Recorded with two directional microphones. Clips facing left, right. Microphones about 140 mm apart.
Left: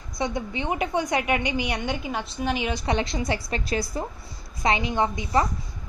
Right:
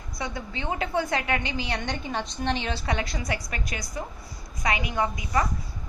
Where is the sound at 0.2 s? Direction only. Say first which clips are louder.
Left 5 dB; 20° left (ahead or behind).